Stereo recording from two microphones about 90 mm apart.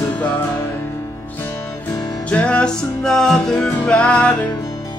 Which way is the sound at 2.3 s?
15° left (ahead or behind).